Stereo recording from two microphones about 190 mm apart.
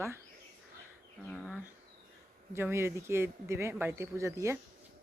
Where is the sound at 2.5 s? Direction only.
15° right (ahead or behind).